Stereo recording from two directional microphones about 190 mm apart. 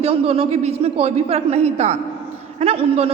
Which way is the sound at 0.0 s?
30° right (ahead or behind).